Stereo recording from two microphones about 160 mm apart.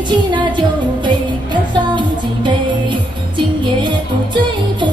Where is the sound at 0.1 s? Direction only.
30° right (ahead or behind).